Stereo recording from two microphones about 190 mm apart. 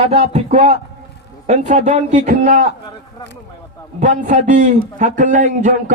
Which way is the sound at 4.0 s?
40° right (ahead or behind).